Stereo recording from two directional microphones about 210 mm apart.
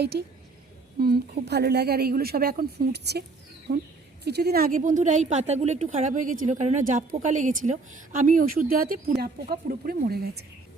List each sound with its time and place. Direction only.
0.0 s a woman's voice: 50° right (ahead or behind)